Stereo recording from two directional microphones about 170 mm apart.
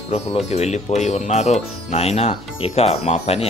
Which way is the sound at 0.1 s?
40° left (ahead or behind).